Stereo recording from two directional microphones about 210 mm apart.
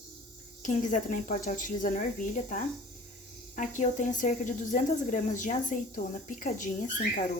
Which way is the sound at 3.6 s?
40° left (ahead or behind).